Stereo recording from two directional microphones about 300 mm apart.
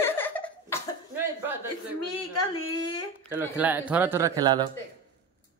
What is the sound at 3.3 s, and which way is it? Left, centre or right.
Speech, centre.